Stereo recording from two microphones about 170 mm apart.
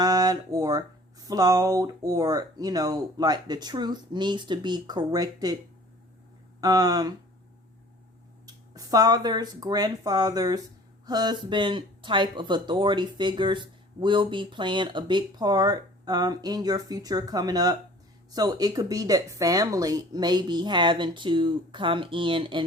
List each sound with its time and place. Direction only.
0.0 s speech: 25° right (ahead or behind)
6.6 s speech: 25° right (ahead or behind)
8.4 s speech: 20° right (ahead or behind)